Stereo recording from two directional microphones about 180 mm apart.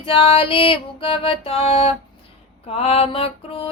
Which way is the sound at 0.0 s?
30° left (ahead or behind).